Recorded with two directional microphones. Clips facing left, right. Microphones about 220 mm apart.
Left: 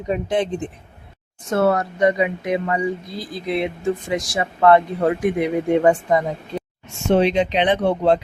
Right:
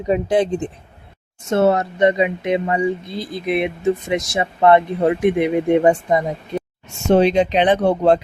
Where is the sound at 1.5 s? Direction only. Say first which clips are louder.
Right 2 dB; 25° right (ahead or behind).